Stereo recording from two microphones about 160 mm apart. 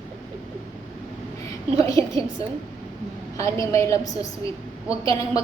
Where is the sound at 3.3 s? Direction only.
20° left (ahead or behind).